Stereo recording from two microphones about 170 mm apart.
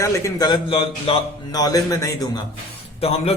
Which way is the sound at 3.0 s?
35° left (ahead or behind).